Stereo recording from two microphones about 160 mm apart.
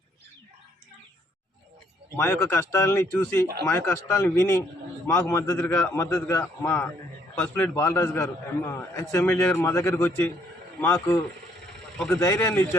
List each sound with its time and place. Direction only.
2.1 s a man's voice: 15° left (ahead or behind)